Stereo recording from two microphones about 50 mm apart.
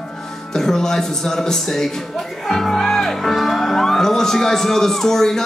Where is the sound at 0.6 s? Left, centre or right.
Centre.